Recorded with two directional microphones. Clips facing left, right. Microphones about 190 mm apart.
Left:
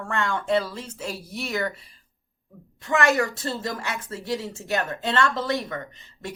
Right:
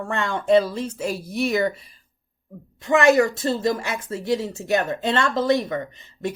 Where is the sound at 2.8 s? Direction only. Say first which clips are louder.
Right 6 dB; 15° right (ahead or behind).